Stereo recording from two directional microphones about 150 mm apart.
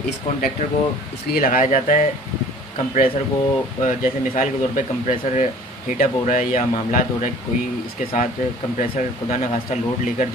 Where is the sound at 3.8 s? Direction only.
60° left (ahead or behind).